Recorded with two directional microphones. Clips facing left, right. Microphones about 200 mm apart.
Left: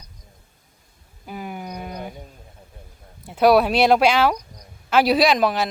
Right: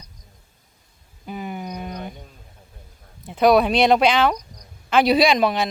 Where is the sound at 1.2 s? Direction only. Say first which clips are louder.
Right 2 dB; 5° left (ahead or behind).